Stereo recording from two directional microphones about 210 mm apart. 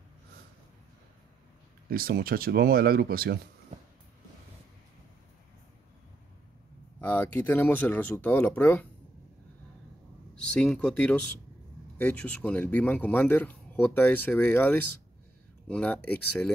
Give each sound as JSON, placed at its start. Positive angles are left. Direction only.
{"t": 1.9, "sound": "speech", "side_deg": -45}
{"t": 7.0, "sound": "speech", "side_deg": 10}
{"t": 10.6, "sound": "speech", "side_deg": 5}